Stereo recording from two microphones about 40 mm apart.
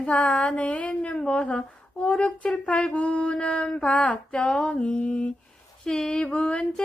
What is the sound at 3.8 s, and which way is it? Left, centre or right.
Female singing, left.